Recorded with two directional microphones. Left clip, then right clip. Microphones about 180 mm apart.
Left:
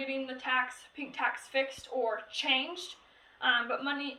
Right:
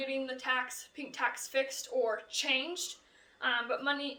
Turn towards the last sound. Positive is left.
turn(degrees=-40)  # may be behind; listen again after turning